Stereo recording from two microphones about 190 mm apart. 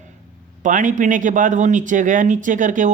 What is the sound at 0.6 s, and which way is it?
A man's voice, 45° right (ahead or behind).